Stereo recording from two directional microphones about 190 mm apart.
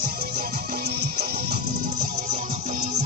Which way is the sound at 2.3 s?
40° right (ahead or behind).